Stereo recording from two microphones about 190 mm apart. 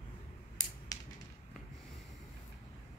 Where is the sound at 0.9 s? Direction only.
20° left (ahead or behind).